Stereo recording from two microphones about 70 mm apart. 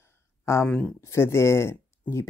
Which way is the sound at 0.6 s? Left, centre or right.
Centre.